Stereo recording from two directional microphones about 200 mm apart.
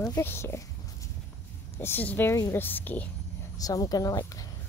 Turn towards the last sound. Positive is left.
turn(degrees=20)  # may be behind; listen again after turning